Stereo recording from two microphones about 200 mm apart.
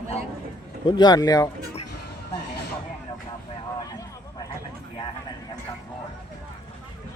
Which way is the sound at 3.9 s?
15° left (ahead or behind).